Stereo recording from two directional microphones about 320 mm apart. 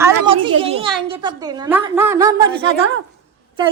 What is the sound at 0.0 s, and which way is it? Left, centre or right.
Children playing, centre.